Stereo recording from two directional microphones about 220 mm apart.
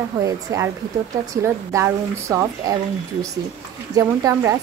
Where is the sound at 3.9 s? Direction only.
15° right (ahead or behind).